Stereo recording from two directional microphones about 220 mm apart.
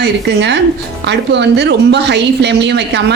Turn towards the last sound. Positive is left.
turn(degrees=-50)  # may be behind; listen again after turning